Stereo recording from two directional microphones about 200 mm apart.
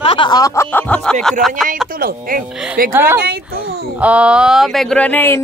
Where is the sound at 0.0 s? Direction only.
25° left (ahead or behind); by 1.1 s 5° left (ahead or behind).